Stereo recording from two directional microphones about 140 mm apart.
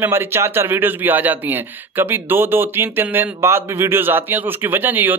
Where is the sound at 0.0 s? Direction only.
15° right (ahead or behind).